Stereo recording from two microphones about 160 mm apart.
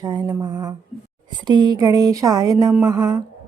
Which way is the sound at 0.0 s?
25° right (ahead or behind).